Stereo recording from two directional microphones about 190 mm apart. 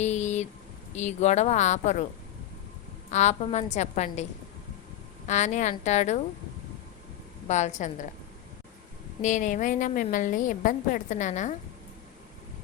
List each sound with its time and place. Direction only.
0.0 s a sound: 35° left (ahead or behind)
0.9 s a woman's voice: 35° left (ahead or behind)
3.1 s a woman's voice: 35° left (ahead or behind)
7.4 s a woman's voice: 35° left (ahead or behind)
9.2 s a woman's voice: 40° left (ahead or behind)